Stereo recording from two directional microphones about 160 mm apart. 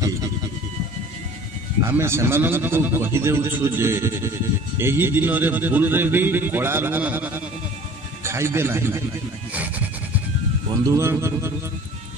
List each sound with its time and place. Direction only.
1.8 s a man's voice: 15° right (ahead or behind)
9.5 s music: 10° right (ahead or behind)
11.0 s a man's voice: 15° right (ahead or behind)